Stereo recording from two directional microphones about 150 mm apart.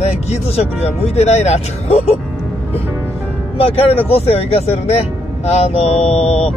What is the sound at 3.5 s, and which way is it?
A man's voice, 40° left (ahead or behind).